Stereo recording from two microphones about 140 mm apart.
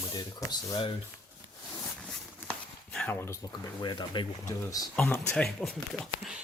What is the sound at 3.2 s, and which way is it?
Speech, 20° left (ahead or behind).